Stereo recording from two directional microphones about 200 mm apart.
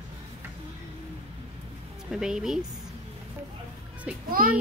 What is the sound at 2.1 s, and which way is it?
Speech, 5° right (ahead or behind).